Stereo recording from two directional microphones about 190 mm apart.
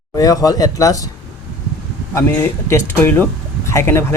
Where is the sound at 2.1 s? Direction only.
15° left (ahead or behind).